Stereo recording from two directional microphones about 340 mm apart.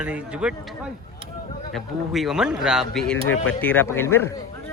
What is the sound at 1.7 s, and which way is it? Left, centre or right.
A man's voice, centre.